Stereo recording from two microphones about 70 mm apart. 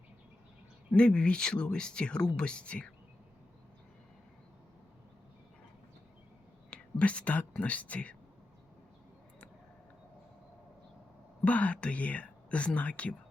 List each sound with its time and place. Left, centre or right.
0.9 s speech: centre
6.7 s speech: centre
11.4 s speech: centre